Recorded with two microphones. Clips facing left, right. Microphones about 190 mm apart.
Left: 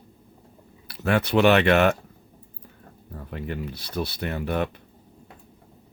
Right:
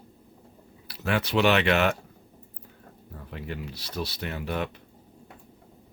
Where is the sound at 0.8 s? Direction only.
55° left (ahead or behind).